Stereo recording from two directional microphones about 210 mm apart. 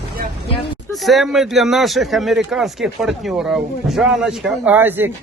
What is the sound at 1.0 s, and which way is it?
A man's voice, centre (ahead or behind).